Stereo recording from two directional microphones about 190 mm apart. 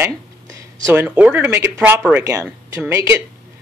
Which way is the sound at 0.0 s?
15° right (ahead or behind).